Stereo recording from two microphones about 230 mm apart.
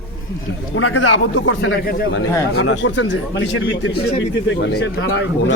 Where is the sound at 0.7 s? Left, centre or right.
Left.